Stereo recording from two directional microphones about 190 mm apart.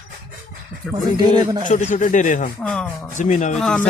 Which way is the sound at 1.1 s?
20° right (ahead or behind).